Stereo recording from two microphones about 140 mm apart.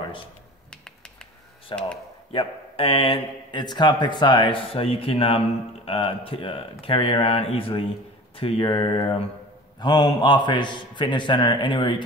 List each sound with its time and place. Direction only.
1.7 s speech: 35° left (ahead or behind)